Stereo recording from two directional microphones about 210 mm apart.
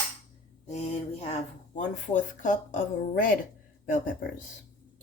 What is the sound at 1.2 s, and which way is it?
Speech, 35° left (ahead or behind).